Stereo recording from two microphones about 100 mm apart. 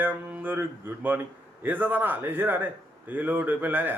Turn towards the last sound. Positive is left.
turn(degrees=-20)  # may be behind; listen again after turning